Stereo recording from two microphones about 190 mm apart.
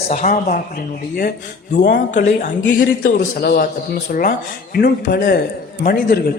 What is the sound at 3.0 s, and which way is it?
Speech, 50° left (ahead or behind).